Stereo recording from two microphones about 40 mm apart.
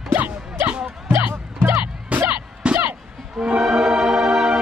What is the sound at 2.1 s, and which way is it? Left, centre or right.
Music, right.